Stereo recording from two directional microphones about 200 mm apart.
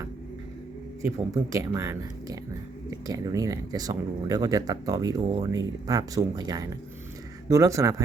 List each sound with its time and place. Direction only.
1.0 s speech: 15° right (ahead or behind)